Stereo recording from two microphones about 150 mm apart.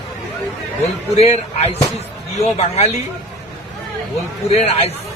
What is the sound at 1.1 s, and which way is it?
A man's voice, 45° left (ahead or behind).